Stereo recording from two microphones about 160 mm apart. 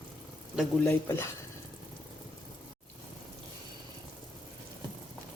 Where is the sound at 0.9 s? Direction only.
15° left (ahead or behind).